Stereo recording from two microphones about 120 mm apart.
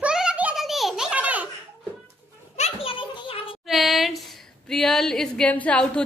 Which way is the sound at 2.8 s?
50° left (ahead or behind).